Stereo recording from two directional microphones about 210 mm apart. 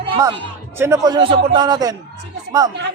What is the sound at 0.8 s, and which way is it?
A man's voice, 15° right (ahead or behind).